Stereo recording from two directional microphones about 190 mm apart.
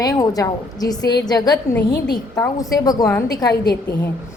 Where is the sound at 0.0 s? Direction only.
20° left (ahead or behind).